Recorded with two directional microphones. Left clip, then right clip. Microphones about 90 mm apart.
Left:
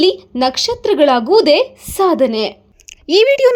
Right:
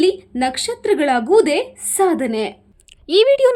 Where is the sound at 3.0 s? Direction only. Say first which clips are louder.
Left 2 dB; 50° left (ahead or behind).